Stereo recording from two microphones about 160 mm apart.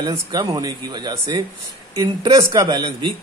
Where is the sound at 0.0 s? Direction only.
25° right (ahead or behind).